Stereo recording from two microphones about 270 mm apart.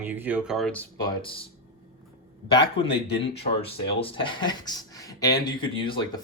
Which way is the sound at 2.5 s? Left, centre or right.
Centre.